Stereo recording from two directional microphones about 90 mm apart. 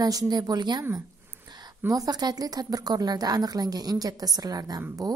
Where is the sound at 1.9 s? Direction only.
45° right (ahead or behind).